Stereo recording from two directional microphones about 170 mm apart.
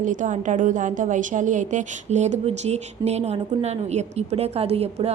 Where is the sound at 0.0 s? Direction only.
50° right (ahead or behind).